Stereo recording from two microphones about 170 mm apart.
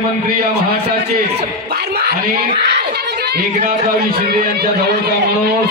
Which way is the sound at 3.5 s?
45° right (ahead or behind).